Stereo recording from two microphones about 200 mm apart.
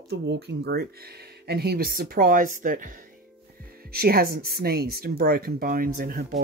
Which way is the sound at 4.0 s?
50° right (ahead or behind).